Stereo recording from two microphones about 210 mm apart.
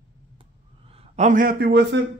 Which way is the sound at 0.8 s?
30° right (ahead or behind).